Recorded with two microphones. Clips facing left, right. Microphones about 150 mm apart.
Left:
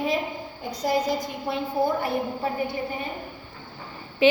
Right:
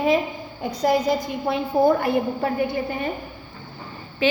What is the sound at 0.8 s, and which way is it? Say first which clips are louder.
Speech: right 4 dB; 65° right (ahead or behind).